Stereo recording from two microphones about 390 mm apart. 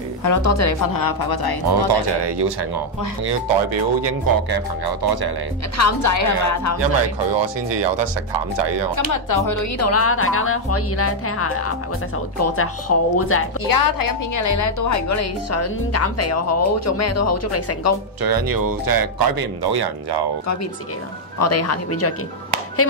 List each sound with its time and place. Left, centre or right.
0.2 s a woman's voice: left
0.9 s speech: left
1.7 s speech: right
4.0 s speech: right
5.8 s a woman's voice: left
6.8 s speech: right
8.9 s a woman's voice: left
13.7 s a woman's voice: left
18.2 s speech: right
21.4 s a woman's voice: left